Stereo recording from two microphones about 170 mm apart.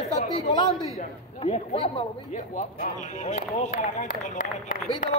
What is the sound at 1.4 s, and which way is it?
Speech, 35° left (ahead or behind).